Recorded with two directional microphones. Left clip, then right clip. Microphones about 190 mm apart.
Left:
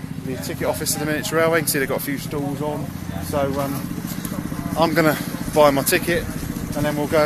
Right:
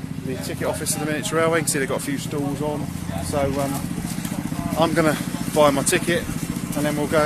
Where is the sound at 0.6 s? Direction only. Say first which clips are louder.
Left 3 dB; 25° left (ahead or behind).